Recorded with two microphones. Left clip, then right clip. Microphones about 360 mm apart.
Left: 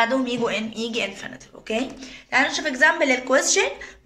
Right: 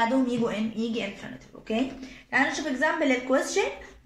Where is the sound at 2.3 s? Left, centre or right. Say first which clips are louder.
Left 4 dB; left.